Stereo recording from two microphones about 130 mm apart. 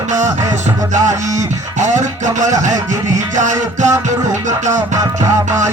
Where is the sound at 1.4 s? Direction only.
70° right (ahead or behind).